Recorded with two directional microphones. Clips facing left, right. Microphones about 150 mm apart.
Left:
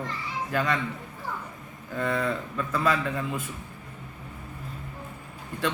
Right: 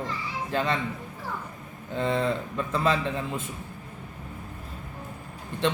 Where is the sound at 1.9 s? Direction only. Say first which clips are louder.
Right 2 dB; 25° right (ahead or behind).